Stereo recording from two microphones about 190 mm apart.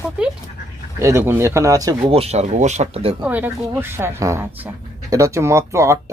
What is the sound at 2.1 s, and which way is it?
Speech, 35° right (ahead or behind).